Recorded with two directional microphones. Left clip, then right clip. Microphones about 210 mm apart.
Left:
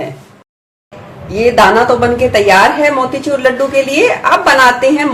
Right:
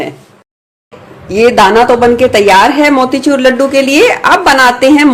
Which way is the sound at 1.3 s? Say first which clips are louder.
Right 2 dB; 50° right (ahead or behind).